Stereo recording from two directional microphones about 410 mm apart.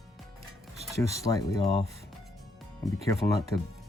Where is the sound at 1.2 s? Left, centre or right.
Centre.